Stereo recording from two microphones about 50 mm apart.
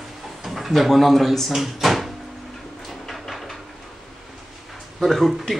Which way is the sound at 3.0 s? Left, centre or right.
Centre.